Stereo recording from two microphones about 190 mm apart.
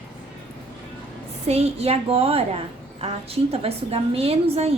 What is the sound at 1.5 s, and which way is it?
A woman's voice, 35° right (ahead or behind).